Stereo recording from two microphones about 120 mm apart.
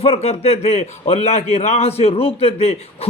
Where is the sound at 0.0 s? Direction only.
55° left (ahead or behind).